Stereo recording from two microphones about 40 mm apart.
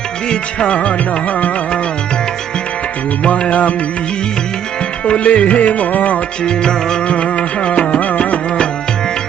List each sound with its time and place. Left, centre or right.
0.3 s music: left
3.2 s music: left
5.0 s music: left
6.4 s music: centre
7.1 s music: left